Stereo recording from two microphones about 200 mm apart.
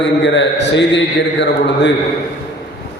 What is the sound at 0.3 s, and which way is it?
A man's voice, 60° left (ahead or behind).